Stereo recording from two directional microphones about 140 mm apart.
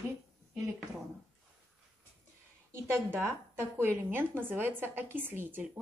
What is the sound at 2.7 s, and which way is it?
A woman's voice, 15° right (ahead or behind).